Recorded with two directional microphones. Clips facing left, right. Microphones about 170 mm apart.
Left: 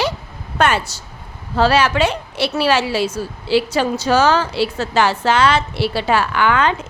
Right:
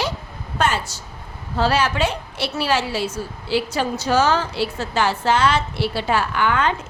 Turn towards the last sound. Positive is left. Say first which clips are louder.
# left 3 dB
turn(degrees=90)